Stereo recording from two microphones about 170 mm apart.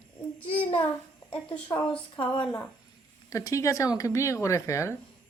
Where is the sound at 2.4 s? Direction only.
10° left (ahead or behind).